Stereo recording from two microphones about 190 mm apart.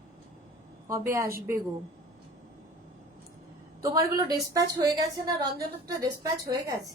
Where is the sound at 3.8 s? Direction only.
20° right (ahead or behind).